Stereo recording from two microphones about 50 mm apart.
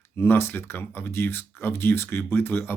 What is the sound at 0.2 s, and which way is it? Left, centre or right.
Speech, left.